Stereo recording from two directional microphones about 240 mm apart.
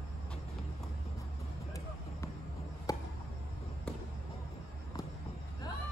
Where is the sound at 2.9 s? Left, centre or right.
Centre.